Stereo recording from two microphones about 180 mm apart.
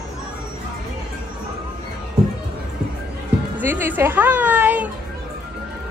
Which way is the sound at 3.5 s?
10° right (ahead or behind).